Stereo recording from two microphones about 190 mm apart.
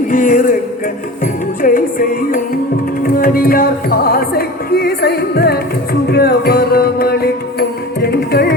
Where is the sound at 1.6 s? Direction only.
45° left (ahead or behind).